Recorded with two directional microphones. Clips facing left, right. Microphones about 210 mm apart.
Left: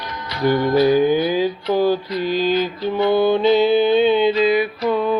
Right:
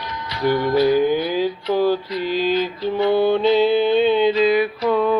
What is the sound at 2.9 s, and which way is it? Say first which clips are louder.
Mantra: left 1 dB; centre (ahead or behind).